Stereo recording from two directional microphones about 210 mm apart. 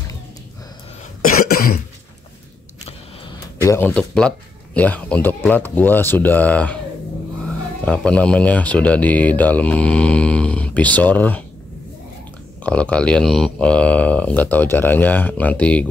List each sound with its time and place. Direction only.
1.2 s cough: 45° left (ahead or behind)
3.6 s speech: 10° left (ahead or behind)
7.8 s speech: 5° left (ahead or behind)
12.6 s speech: 5° left (ahead or behind)